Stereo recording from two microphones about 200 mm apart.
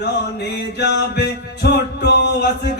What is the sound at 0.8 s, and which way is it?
Music, 55° left (ahead or behind).